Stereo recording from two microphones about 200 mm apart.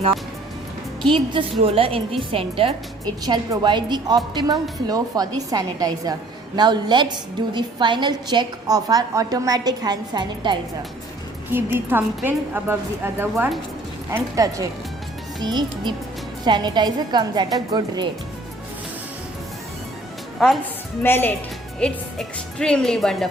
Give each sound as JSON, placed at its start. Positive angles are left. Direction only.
{"t": 1.1, "sound": "a woman's voice", "side_deg": -25}
{"t": 11.5, "sound": "a woman's voice", "side_deg": -10}
{"t": 20.4, "sound": "a woman's voice", "side_deg": 0}